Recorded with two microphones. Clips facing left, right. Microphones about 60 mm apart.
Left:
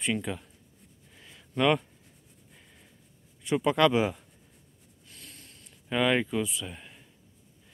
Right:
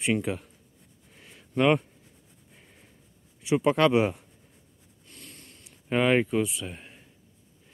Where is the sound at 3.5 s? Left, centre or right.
Centre.